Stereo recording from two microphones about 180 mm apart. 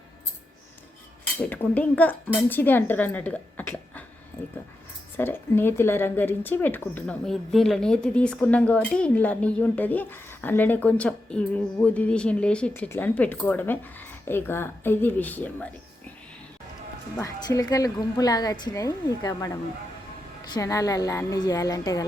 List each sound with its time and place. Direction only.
1.4 s speech: 10° left (ahead or behind)
5.1 s speech: 10° left (ahead or behind)
17.2 s a woman's voice: 20° left (ahead or behind)